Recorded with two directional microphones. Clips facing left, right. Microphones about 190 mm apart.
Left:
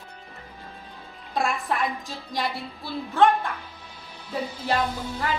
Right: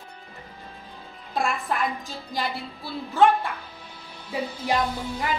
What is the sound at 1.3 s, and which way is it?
Speech, centre (ahead or behind).